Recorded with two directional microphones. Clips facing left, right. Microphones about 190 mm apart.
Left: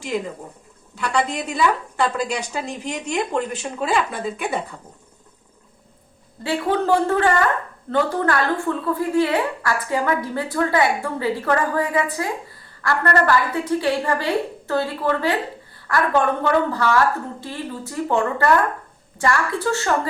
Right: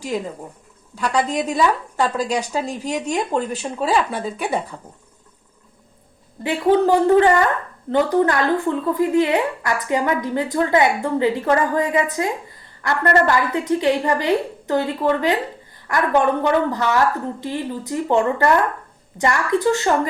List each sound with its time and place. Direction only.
1.1 s a woman's voice: 40° right (ahead or behind)
6.4 s a woman's voice: 15° right (ahead or behind)